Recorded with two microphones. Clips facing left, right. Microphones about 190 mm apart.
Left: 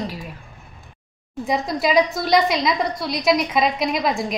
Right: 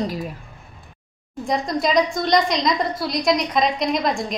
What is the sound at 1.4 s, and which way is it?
A woman's voice, 5° left (ahead or behind).